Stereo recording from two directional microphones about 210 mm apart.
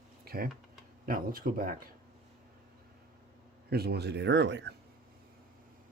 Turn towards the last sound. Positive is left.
turn(degrees=-55)  # may be behind; listen again after turning